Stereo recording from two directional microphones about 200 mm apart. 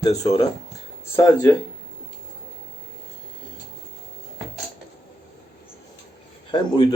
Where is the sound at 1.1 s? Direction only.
15° left (ahead or behind).